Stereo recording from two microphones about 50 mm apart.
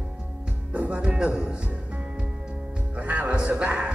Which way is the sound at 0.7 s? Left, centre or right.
Right.